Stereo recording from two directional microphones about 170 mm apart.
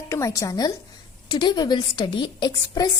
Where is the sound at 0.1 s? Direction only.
20° left (ahead or behind).